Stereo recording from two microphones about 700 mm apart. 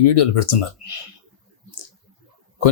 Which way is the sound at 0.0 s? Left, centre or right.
Left.